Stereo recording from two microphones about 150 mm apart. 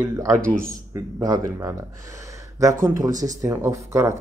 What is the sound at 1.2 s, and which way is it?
Speech, 25° right (ahead or behind).